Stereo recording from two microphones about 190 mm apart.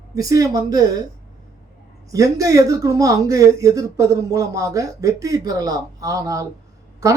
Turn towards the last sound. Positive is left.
turn(degrees=-15)  # may be behind; listen again after turning